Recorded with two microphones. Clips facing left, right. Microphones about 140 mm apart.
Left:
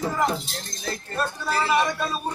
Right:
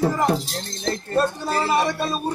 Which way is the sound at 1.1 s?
35° right (ahead or behind).